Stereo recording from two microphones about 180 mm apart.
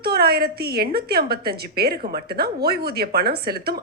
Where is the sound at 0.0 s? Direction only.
60° right (ahead or behind).